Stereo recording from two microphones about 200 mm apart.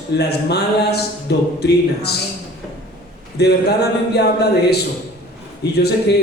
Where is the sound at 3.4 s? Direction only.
55° left (ahead or behind).